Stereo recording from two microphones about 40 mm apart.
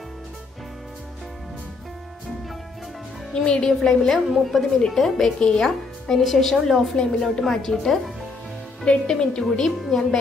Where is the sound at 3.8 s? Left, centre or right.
Centre.